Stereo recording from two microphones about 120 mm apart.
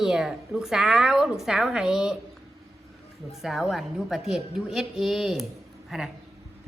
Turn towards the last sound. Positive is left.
turn(degrees=0)  # may be behind; listen again after turning